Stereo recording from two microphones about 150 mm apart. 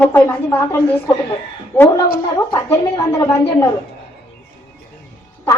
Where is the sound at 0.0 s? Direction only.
15° left (ahead or behind).